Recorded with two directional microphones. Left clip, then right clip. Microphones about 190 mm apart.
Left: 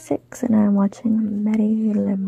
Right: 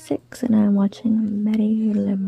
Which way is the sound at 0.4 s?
10° right (ahead or behind).